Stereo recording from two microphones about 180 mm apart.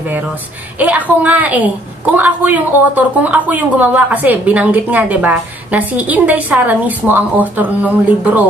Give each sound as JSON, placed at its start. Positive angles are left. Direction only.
{"t": 0.7, "sound": "a woman's voice", "side_deg": -10}